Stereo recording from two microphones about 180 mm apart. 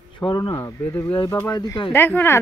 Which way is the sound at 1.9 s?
10° left (ahead or behind).